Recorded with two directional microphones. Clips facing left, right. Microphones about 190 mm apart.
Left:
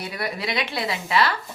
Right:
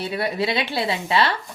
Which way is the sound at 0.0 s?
30° right (ahead or behind).